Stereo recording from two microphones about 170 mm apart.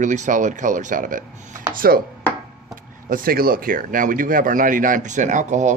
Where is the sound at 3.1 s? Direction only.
55° right (ahead or behind).